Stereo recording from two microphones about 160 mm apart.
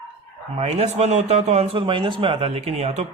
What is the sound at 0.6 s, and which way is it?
Speech, 40° right (ahead or behind).